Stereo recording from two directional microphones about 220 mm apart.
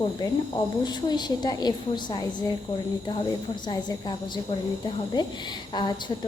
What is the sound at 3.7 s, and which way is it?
Speech, 20° left (ahead or behind).